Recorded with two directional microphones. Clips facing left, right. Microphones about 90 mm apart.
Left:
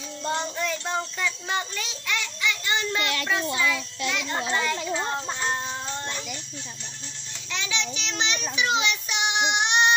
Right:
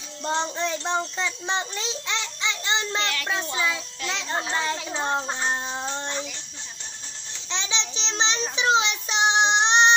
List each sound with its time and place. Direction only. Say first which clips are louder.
0.2 s a child's voice: right 2 dB; 25° right (ahead or behind)
7.4 s child singing: even; 25° right (ahead or behind)